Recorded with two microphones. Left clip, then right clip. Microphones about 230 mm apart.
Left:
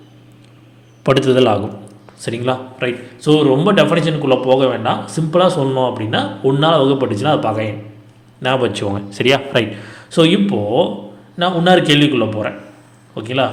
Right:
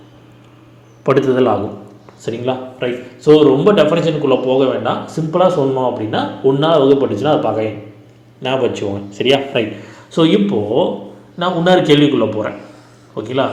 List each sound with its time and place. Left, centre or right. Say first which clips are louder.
1.0 s a man's voice: even; left